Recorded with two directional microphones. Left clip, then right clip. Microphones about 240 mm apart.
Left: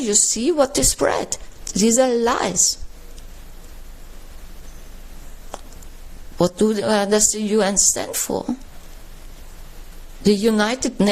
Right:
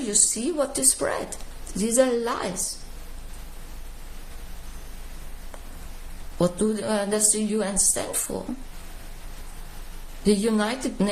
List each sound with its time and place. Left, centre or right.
0.1 s a woman's voice: left
6.4 s a woman's voice: left
10.2 s a woman's voice: left